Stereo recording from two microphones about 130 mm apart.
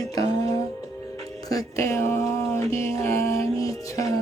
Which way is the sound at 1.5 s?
25° left (ahead or behind).